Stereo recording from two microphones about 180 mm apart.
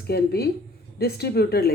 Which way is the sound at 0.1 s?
60° left (ahead or behind).